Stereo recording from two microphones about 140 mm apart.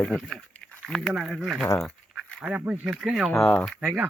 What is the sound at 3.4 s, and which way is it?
Speech, 5° left (ahead or behind).